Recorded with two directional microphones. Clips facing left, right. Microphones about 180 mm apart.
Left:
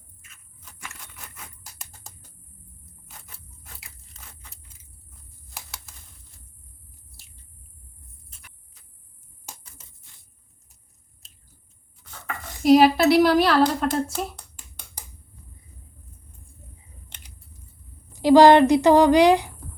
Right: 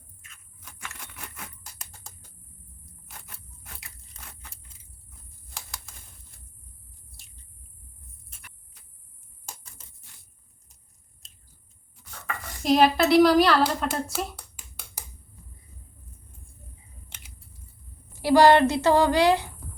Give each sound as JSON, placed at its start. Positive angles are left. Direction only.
{"t": 5.5, "sound": "typing", "side_deg": 5}
{"t": 11.2, "sound": "chewing", "side_deg": 0}
{"t": 12.6, "sound": "speech", "side_deg": 5}
{"t": 18.1, "sound": "a woman's voice", "side_deg": 15}